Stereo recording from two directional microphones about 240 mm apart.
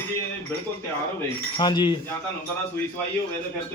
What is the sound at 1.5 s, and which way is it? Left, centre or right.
Speech, centre.